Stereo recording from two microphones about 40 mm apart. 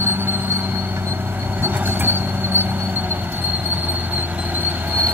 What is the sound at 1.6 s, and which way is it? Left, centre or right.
Vehicle, right.